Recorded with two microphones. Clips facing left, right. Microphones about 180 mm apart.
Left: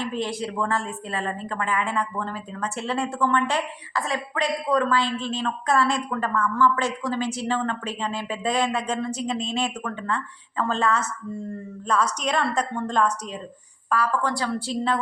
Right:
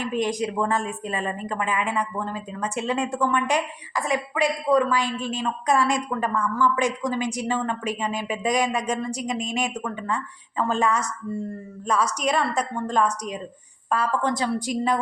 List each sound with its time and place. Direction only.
0.0 s speech: 15° right (ahead or behind)
13.9 s a woman's voice: 20° right (ahead or behind)